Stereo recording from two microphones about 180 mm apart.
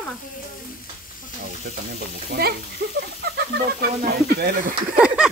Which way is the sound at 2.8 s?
70° right (ahead or behind).